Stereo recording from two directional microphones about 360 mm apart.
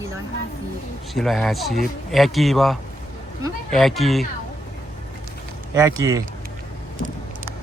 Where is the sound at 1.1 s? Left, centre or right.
Centre.